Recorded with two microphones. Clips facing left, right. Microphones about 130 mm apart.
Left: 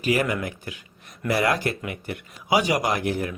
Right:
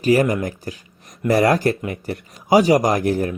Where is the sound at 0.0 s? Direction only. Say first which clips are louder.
Right 7 dB; 40° right (ahead or behind).